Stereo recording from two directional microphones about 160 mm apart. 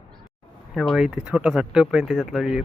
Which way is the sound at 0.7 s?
Centre (ahead or behind).